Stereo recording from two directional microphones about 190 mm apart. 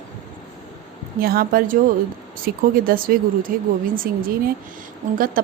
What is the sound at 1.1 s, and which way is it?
A woman's voice, 50° right (ahead or behind).